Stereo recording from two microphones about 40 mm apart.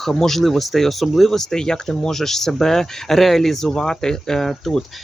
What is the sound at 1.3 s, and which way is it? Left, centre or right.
Speech, centre.